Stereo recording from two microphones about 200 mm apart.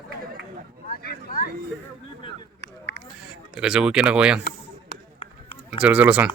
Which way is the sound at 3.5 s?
5° right (ahead or behind).